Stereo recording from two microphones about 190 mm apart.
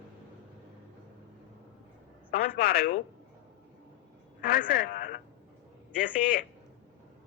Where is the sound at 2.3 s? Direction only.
50° left (ahead or behind).